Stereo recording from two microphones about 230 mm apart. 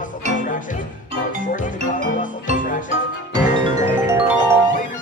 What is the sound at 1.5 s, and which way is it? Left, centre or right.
Music, left.